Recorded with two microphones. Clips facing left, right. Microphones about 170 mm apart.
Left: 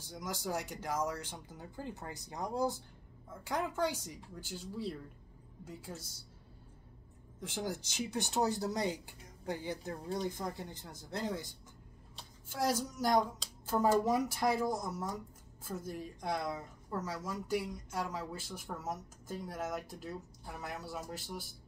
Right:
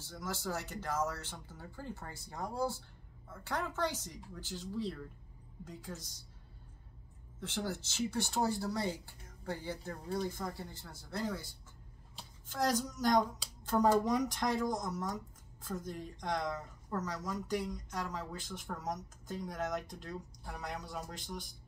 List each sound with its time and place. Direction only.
0.0 s speech: 15° left (ahead or behind)
7.3 s speech: 15° left (ahead or behind)
12.4 s speech: 10° left (ahead or behind)